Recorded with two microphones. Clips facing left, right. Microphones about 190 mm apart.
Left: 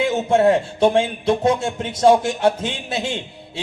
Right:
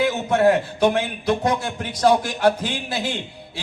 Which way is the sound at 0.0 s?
25° left (ahead or behind).